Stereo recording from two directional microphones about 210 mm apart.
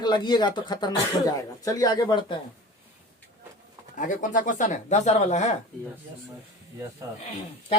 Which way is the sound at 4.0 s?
35° left (ahead or behind).